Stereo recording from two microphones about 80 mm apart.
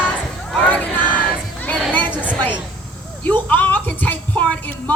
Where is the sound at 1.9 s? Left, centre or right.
Left.